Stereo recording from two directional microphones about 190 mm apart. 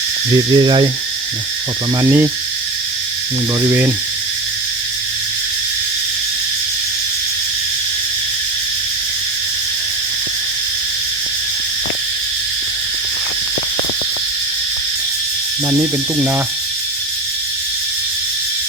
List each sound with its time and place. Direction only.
0.5 s speech: 25° right (ahead or behind)
2.0 s speech: 15° right (ahead or behind)
3.6 s speech: 15° right (ahead or behind)
15.8 s speech: 10° right (ahead or behind)